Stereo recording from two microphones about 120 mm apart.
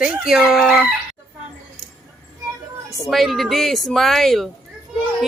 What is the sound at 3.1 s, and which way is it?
Speech, centre (ahead or behind).